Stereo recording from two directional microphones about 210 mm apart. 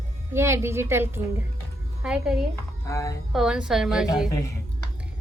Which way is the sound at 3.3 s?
Centre (ahead or behind).